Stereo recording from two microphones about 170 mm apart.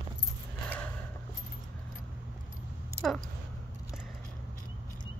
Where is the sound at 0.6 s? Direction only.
10° left (ahead or behind).